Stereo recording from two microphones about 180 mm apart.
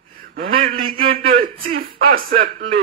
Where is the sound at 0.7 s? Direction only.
30° right (ahead or behind).